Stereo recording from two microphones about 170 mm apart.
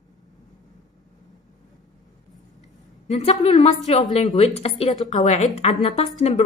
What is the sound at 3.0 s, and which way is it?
A woman's voice, 35° left (ahead or behind).